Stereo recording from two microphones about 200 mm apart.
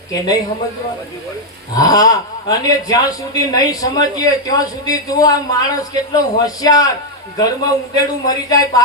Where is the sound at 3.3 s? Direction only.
20° left (ahead or behind).